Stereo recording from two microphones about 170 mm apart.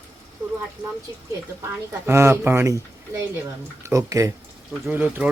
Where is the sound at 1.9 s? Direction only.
15° right (ahead or behind).